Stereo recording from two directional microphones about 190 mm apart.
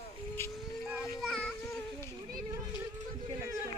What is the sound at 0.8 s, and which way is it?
Children playing, centre (ahead or behind).